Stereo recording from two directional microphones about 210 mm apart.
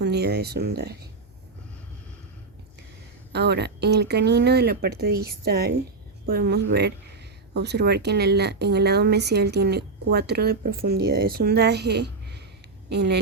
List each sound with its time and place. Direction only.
0.0 s speech: 50° right (ahead or behind)
3.3 s speech: 50° right (ahead or behind)